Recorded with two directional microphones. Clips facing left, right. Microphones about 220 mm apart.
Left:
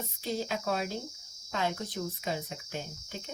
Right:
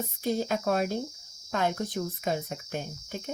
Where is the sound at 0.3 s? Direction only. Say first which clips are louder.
Right 5 dB; 50° right (ahead or behind).